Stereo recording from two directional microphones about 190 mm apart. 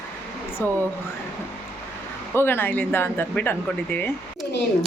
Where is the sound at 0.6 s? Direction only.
10° left (ahead or behind).